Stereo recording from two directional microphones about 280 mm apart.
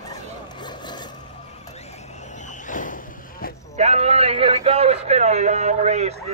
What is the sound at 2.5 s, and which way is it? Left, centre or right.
Vehicle, left.